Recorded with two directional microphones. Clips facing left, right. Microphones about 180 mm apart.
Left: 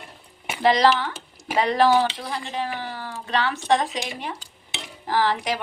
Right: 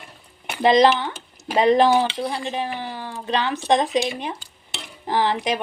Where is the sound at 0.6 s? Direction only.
20° right (ahead or behind).